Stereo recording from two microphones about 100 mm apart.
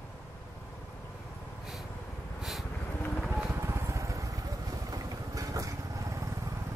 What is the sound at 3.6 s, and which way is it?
Vehicle, 25° right (ahead or behind).